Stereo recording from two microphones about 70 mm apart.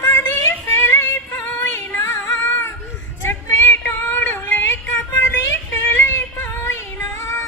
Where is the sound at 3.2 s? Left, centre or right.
Left.